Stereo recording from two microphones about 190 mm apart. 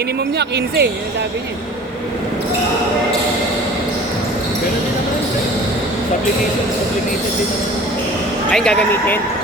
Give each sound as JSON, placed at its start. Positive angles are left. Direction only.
{"t": 0.3, "sound": "speech", "side_deg": -60}
{"t": 8.5, "sound": "speech", "side_deg": 5}